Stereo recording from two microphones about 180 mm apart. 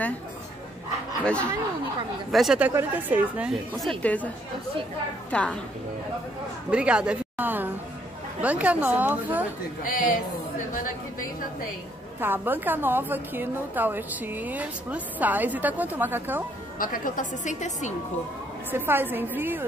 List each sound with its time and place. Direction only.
1.2 s a woman's voice: 5° left (ahead or behind)
5.3 s a woman's voice: 5° left (ahead or behind)
6.7 s a woman's voice: 5° right (ahead or behind)
9.8 s a woman's voice: 50° left (ahead or behind)
12.2 s a woman's voice: 10° right (ahead or behind)
16.7 s a woman's voice: 50° left (ahead or behind)
18.7 s a woman's voice: 10° right (ahead or behind)